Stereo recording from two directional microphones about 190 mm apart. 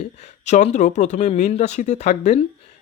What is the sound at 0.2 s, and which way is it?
Speech, 35° left (ahead or behind).